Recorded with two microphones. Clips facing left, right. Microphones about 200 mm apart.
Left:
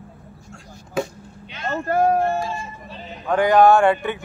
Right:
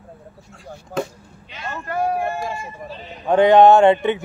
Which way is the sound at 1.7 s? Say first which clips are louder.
Left 5 dB; 40° left (ahead or behind).